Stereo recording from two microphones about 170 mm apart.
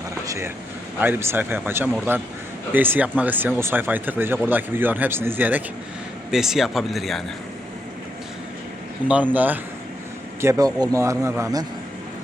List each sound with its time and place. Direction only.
0.3 s speech: 15° right (ahead or behind); by 7.2 s centre (ahead or behind)
9.0 s speech: 10° right (ahead or behind)